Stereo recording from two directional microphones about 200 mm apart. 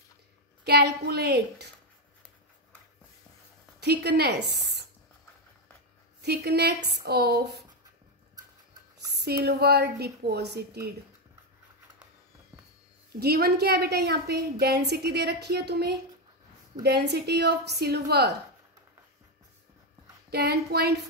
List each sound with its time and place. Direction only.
0.7 s a woman's voice: 55° right (ahead or behind)
3.8 s a woman's voice: 55° right (ahead or behind)
6.2 s a woman's voice: 55° right (ahead or behind)
9.1 s a woman's voice: 55° right (ahead or behind)
13.2 s a woman's voice: 55° right (ahead or behind)
20.2 s a woman's voice: 55° right (ahead or behind)